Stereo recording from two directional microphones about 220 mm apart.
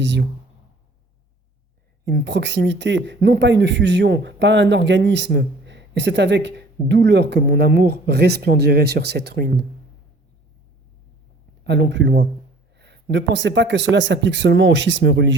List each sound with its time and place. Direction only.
0.0 s speech: 55° right (ahead or behind)
2.0 s speech: 50° right (ahead or behind)
11.6 s speech: 55° right (ahead or behind)